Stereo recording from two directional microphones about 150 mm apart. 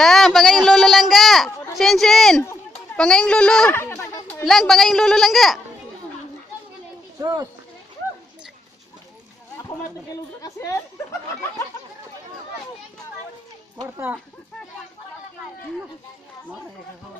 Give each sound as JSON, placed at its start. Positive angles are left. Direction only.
{"t": 0.0, "sound": "a sound", "side_deg": 0}
{"t": 1.8, "sound": "a man's voice", "side_deg": 0}
{"t": 3.8, "sound": "a man's voice", "side_deg": 15}
{"t": 7.2, "sound": "speech", "side_deg": -20}
{"t": 10.4, "sound": "speech", "side_deg": 20}
{"t": 13.8, "sound": "speech", "side_deg": -15}